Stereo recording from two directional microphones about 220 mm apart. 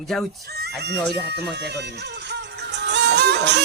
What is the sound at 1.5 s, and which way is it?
Music, 50° right (ahead or behind).